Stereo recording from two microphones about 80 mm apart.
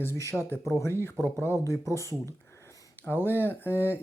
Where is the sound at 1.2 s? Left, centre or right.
Right.